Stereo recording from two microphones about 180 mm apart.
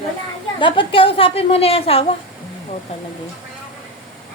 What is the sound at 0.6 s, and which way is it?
A woman's voice, 30° left (ahead or behind).